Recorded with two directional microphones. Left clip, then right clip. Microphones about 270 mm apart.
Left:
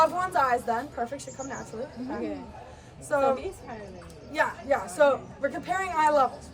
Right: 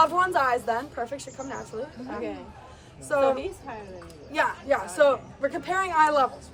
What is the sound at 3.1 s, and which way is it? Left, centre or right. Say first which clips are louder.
Speech: right 2 dB; right.